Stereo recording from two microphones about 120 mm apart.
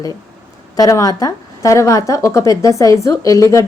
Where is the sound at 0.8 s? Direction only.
30° left (ahead or behind).